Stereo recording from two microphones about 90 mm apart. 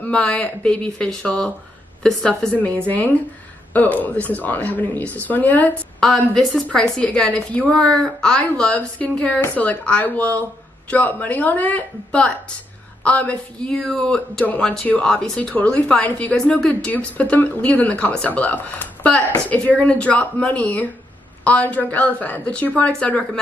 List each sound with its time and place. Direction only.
0.0 s a woman's voice: 15° left (ahead or behind)
5.9 s a woman's voice: 5° left (ahead or behind)